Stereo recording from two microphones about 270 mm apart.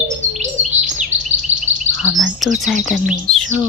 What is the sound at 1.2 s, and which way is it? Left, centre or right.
Chirp, right.